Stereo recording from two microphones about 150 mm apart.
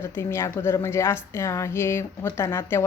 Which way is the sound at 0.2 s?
20° left (ahead or behind).